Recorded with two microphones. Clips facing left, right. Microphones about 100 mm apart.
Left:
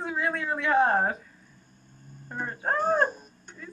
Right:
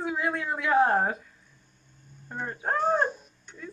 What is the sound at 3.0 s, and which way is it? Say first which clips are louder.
Dog: left 2 dB; 45° left (ahead or behind).